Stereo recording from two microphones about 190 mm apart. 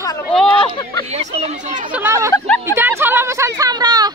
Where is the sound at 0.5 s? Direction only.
25° left (ahead or behind).